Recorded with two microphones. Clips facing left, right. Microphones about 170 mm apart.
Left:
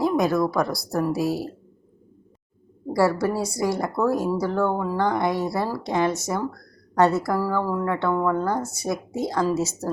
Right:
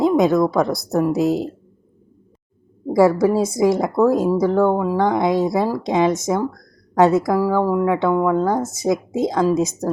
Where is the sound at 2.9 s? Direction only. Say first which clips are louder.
Right 7 dB; 20° right (ahead or behind).